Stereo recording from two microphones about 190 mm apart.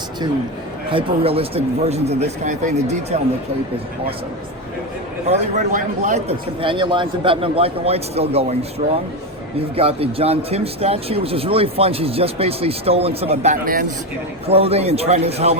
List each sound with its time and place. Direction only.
0.9 s speech: 30° right (ahead or behind)
5.7 s speech: 40° right (ahead or behind)
14.4 s speech: 30° right (ahead or behind)